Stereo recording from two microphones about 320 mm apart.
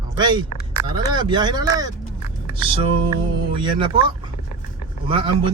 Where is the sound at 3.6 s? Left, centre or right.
Centre.